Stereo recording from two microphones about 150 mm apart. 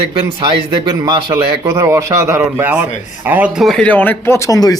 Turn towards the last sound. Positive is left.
turn(degrees=25)  # may be behind; listen again after turning